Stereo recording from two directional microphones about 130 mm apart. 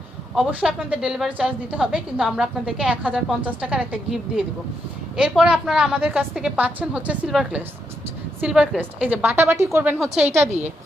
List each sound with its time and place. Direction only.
0.3 s a woman's voice: 5° right (ahead or behind)